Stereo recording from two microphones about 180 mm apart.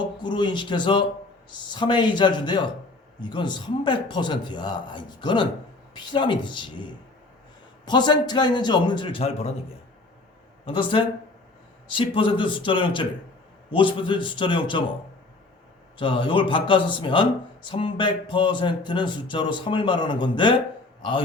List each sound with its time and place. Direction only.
0.2 s speech: 25° left (ahead or behind)
10.7 s speech: 30° left (ahead or behind)
16.0 s a man's voice: 30° left (ahead or behind)